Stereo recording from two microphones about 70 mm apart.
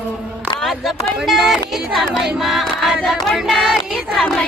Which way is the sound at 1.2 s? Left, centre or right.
Centre.